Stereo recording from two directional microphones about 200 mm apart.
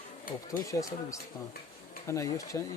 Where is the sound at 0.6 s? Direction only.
15° left (ahead or behind).